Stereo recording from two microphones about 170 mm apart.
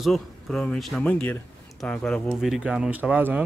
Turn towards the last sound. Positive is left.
turn(degrees=-10)  # may be behind; listen again after turning